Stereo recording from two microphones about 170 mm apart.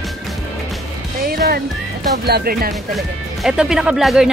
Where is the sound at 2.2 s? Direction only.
65° right (ahead or behind).